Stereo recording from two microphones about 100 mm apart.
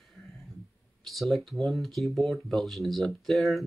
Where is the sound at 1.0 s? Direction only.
Centre (ahead or behind).